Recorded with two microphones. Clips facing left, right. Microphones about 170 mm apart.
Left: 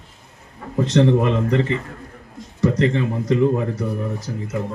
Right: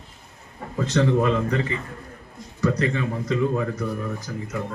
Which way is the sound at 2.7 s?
25° left (ahead or behind).